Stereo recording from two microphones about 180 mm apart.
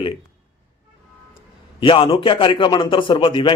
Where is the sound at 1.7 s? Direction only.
30° left (ahead or behind).